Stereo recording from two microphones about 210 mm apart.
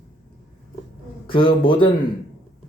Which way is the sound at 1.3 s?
25° left (ahead or behind).